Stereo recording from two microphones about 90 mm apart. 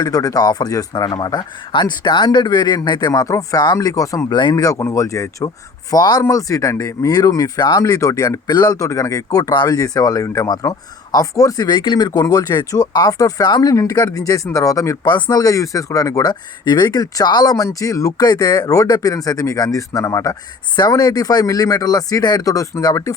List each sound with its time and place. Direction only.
0.0 s speech: 45° left (ahead or behind)
11.7 s speech: 60° left (ahead or behind); by 23.1 s 40° left (ahead or behind)